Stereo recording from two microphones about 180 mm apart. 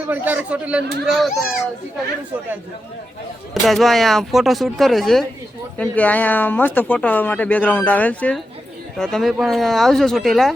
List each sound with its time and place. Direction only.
0.1 s a child's voice: 10° right (ahead or behind)
3.5 s speech: centre (ahead or behind)